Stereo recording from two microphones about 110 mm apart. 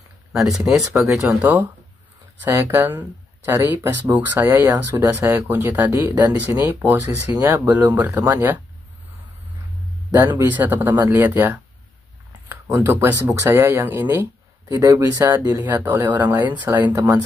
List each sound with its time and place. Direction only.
0.3 s speech: 5° right (ahead or behind)
1.4 s speech: 15° right (ahead or behind)
10.4 s speech: 15° right (ahead or behind)
16.9 s speech: 30° right (ahead or behind)